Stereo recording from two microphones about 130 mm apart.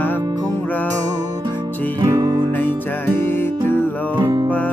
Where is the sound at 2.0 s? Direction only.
25° right (ahead or behind).